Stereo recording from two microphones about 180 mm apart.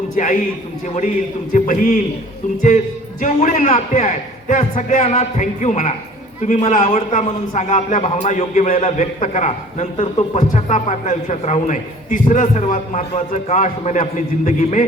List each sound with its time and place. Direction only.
1.5 s a man's voice: 45° left (ahead or behind)